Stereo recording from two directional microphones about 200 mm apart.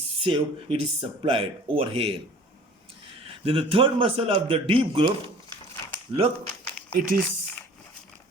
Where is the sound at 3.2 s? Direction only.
30° right (ahead or behind).